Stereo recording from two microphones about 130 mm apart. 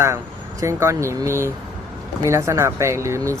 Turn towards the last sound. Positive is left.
turn(degrees=-20)  # may be behind; listen again after turning